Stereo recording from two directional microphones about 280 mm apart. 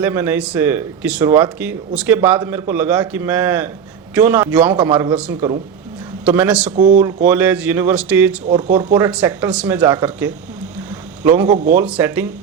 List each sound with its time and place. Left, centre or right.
0.0 s a man's voice: centre
6.7 s speech: right
7.3 s speech: centre
8.4 s speech: right
8.7 s speech: centre